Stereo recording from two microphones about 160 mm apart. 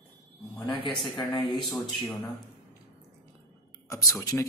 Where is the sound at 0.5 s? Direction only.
25° left (ahead or behind).